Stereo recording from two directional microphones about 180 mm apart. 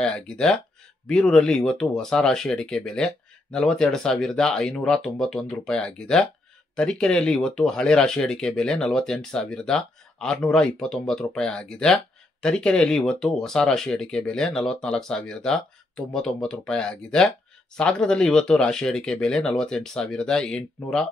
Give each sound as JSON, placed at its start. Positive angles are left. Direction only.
{"t": 0.0, "sound": "speech", "side_deg": 5}